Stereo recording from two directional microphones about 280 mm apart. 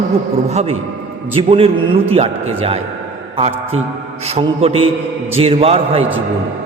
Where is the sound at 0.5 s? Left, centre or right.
Right.